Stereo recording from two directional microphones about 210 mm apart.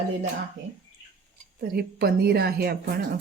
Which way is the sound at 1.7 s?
45° right (ahead or behind).